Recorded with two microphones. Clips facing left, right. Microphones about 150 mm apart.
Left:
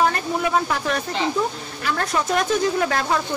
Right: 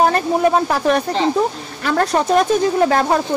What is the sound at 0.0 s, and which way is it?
A woman's voice, 40° right (ahead or behind).